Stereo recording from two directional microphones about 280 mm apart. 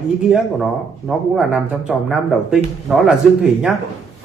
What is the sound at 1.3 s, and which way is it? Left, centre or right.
Speech, centre.